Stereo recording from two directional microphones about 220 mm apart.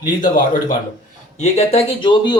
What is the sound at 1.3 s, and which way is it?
Speech, 30° left (ahead or behind).